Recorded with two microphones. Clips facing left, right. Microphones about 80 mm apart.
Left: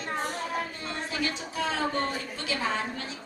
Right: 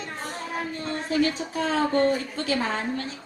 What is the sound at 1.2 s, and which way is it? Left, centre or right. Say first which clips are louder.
Speech: right 7 dB; right.